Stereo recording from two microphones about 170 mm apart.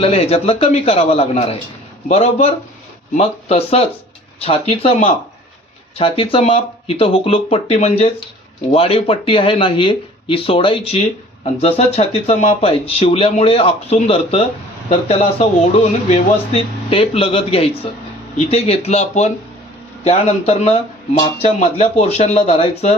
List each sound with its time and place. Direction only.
0.0 s speech: 35° left (ahead or behind)